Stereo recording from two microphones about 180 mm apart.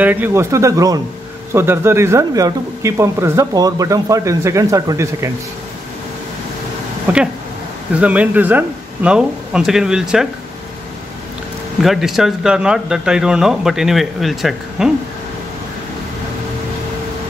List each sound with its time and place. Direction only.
0.0 s speech: 10° right (ahead or behind)
7.1 s speech: 10° right (ahead or behind)
11.8 s speech: centre (ahead or behind)